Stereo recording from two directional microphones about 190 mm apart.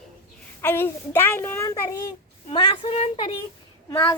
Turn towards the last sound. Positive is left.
turn(degrees=15)  # may be behind; listen again after turning